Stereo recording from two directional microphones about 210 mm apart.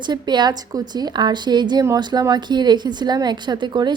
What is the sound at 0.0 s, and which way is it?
A woman's voice, 20° right (ahead or behind).